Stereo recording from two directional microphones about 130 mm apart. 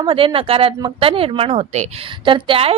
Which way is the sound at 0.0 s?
40° right (ahead or behind).